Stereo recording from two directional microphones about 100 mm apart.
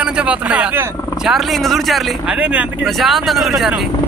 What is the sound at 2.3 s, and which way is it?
Speech, 15° right (ahead or behind).